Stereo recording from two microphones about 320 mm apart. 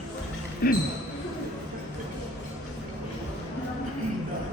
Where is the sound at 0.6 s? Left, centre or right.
Left.